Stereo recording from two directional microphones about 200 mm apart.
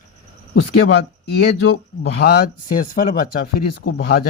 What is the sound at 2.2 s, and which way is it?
Speech, 50° left (ahead or behind).